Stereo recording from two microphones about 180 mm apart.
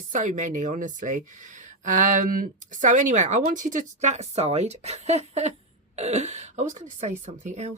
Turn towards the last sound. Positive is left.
turn(degrees=-40)  # may be behind; listen again after turning